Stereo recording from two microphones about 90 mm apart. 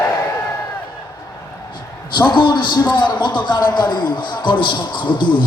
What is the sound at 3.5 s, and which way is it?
A man's voice, 50° left (ahead or behind).